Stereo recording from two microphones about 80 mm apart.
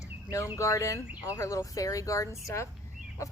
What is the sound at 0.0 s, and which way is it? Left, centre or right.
Bird, left.